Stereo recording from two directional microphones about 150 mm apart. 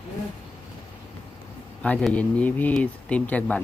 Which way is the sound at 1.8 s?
10° left (ahead or behind).